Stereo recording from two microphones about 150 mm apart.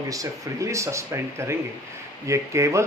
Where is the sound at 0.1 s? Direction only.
20° right (ahead or behind).